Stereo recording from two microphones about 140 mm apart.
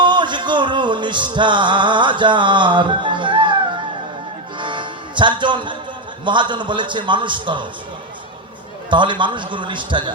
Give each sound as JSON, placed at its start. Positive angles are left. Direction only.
{"t": 0.0, "sound": "music", "side_deg": -35}
{"t": 6.2, "sound": "a man's voice", "side_deg": -35}
{"t": 8.9, "sound": "a man's voice", "side_deg": -35}